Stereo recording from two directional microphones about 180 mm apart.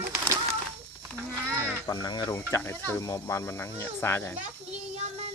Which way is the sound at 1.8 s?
20° left (ahead or behind).